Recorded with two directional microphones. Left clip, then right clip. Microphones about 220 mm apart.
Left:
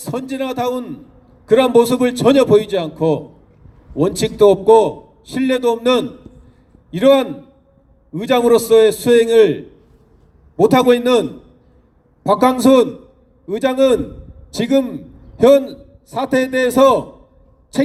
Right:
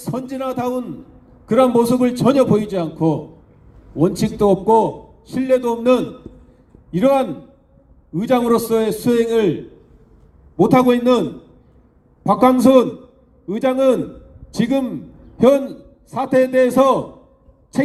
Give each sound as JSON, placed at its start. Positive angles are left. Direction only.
{"t": 0.0, "sound": "a man's voice", "side_deg": 40}
{"t": 10.6, "sound": "a man's voice", "side_deg": 40}
{"t": 12.3, "sound": "a man's voice", "side_deg": 40}